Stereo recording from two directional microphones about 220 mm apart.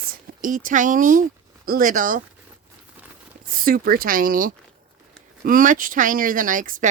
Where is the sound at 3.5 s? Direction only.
40° right (ahead or behind).